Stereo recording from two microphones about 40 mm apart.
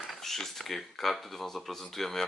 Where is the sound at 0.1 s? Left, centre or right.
Centre.